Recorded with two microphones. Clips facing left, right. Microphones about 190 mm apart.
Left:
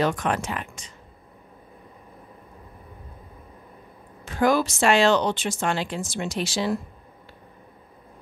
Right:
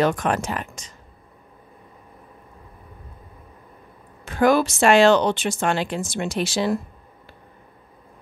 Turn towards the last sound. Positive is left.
turn(degrees=-55)  # may be behind; listen again after turning